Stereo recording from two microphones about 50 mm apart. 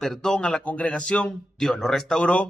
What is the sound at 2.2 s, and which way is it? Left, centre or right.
Speech, left.